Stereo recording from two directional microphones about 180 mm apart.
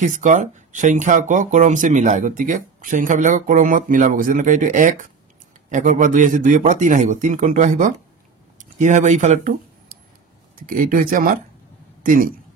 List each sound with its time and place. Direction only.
0.0 s a man's voice: 45° right (ahead or behind)